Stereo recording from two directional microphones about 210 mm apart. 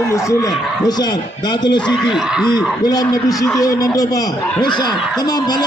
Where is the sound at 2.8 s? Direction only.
20° left (ahead or behind).